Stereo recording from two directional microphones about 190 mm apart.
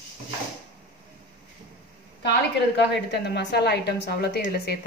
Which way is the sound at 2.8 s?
65° left (ahead or behind).